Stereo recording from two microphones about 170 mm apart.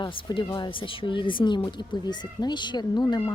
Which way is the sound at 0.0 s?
25° left (ahead or behind).